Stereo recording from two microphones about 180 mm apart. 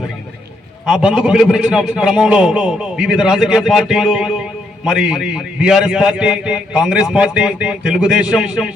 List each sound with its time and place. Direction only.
0.9 s a man's voice: 5° right (ahead or behind)